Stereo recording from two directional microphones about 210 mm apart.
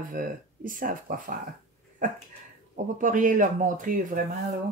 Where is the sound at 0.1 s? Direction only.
40° right (ahead or behind).